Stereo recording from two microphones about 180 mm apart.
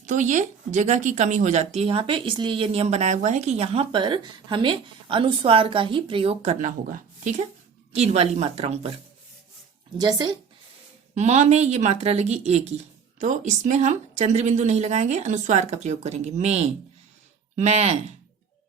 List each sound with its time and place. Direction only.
0.0 s speech: 45° right (ahead or behind)
7.9 s speech: 35° right (ahead or behind)
10.0 s speech: 20° right (ahead or behind)
11.1 s speech: 40° right (ahead or behind)